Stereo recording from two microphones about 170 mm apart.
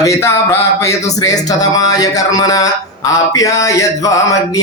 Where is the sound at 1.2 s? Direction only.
20° left (ahead or behind).